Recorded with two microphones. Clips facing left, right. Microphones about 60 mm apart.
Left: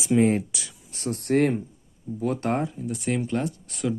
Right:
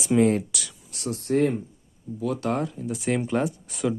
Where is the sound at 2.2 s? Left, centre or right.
Left.